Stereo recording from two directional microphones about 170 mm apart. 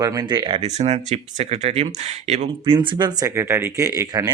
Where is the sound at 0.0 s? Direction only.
20° right (ahead or behind); by 2.7 s 40° right (ahead or behind).